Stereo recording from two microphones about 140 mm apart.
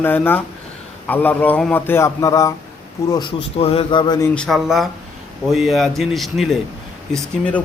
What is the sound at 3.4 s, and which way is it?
Speech, 45° left (ahead or behind).